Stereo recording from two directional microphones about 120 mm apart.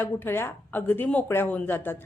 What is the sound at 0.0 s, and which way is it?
A woman's voice, 20° left (ahead or behind).